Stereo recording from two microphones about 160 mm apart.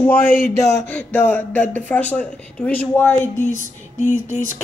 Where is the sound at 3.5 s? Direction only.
50° left (ahead or behind).